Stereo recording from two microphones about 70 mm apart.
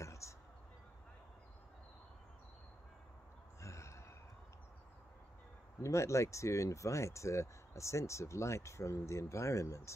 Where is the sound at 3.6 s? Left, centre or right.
Left.